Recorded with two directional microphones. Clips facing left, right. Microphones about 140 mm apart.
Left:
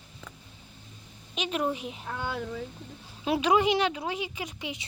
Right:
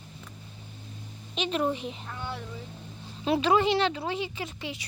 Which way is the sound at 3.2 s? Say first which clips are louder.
Even; 10° left (ahead or behind).